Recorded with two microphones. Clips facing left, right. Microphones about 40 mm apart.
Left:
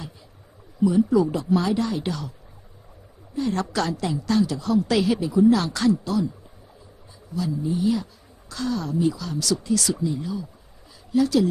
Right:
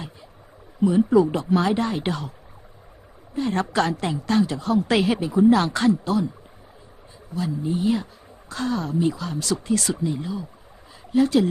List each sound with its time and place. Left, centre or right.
0.8 s a woman's voice: right
3.3 s a woman's voice: right
7.3 s a woman's voice: right